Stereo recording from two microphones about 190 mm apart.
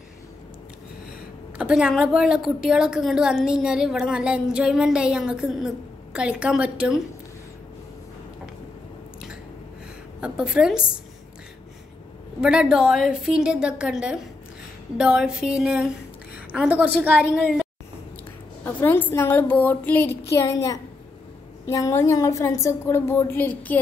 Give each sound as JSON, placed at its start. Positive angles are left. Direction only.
{"t": 1.6, "sound": "a woman's voice", "side_deg": -5}
{"t": 10.2, "sound": "a woman's voice", "side_deg": -5}
{"t": 12.4, "sound": "a woman's voice", "side_deg": -5}
{"t": 18.6, "sound": "a woman's voice", "side_deg": 10}